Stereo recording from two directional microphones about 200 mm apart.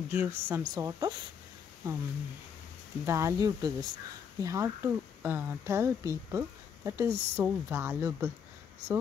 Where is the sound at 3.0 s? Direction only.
15° right (ahead or behind).